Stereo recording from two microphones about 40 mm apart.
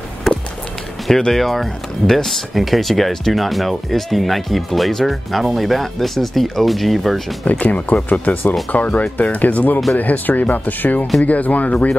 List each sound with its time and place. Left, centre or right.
0.3 s a sound: centre
1.3 s speech: centre
7.4 s speech: left